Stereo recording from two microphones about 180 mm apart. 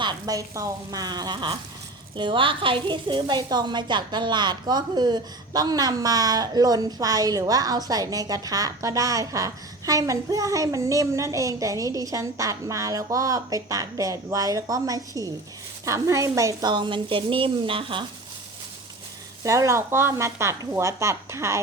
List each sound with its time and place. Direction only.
0.0 s a woman's voice: 20° right (ahead or behind)
19.5 s speech: 15° right (ahead or behind)